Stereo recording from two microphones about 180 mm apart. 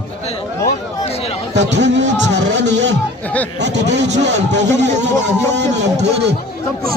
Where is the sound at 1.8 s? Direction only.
80° right.